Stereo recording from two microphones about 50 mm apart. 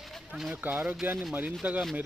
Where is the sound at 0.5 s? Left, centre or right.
Right.